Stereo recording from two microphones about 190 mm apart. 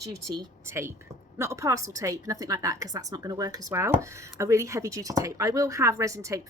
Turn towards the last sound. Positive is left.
turn(degrees=-15)  # may be behind; listen again after turning